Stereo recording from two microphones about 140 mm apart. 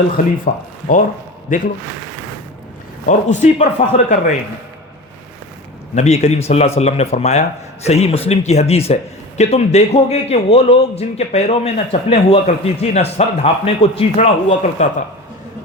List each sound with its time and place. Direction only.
0.4 s speech: 65° left (ahead or behind)
3.1 s speech: 60° left (ahead or behind)
5.9 s a man's voice: 55° left (ahead or behind)